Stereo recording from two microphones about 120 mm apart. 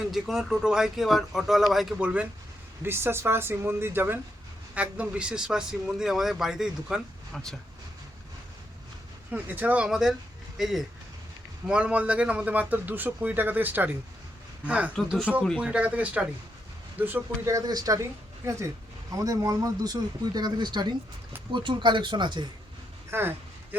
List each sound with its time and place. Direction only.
0.1 s a man's voice: centre (ahead or behind)
2.8 s a man's voice: 20° right (ahead or behind); by 7.5 s centre (ahead or behind)
9.3 s a man's voice: 15° right (ahead or behind); by 18.0 s 30° right (ahead or behind)
18.4 s speech: 20° right (ahead or behind); by 22.4 s 40° right (ahead or behind)
23.1 s speech: 20° right (ahead or behind)